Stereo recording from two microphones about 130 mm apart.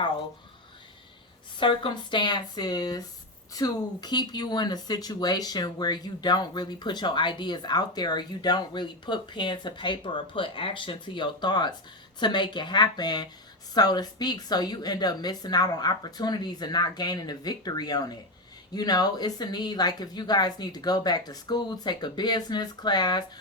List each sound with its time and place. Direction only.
1.5 s speech: 40° left (ahead or behind)